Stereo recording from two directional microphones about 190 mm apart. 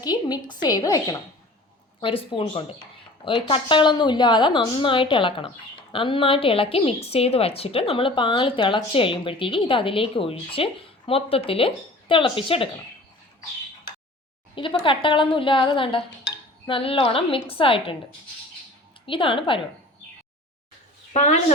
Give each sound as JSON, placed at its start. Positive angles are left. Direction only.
{"t": 0.0, "sound": "a woman's voice", "side_deg": 20}
{"t": 14.5, "sound": "a woman's voice", "side_deg": 25}
{"t": 19.0, "sound": "a woman's voice", "side_deg": 25}
{"t": 21.1, "sound": "a woman's voice", "side_deg": 40}